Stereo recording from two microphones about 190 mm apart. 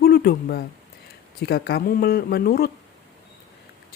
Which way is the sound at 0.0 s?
55° left (ahead or behind).